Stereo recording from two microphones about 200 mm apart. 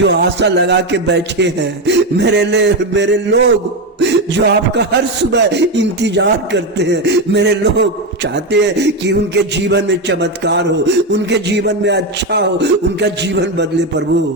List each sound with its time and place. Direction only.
0.0 s speech: 60° right (ahead or behind)
4.0 s music: 60° right (ahead or behind)
5.3 s speech: 60° right (ahead or behind)